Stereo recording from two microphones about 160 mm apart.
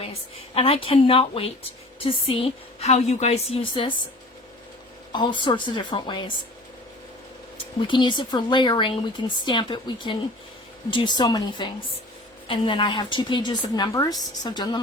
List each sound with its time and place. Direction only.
0.0 s a woman's voice: 35° left (ahead or behind)
5.1 s speech: 30° left (ahead or behind)
7.8 s speech: 30° left (ahead or behind)